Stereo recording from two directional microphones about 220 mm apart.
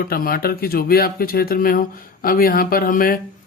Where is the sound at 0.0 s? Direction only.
40° left (ahead or behind).